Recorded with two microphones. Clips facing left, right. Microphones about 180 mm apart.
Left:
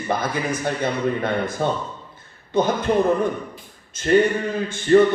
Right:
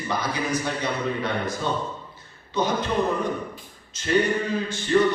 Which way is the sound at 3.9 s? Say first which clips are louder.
Left 7 dB; 50° left (ahead or behind).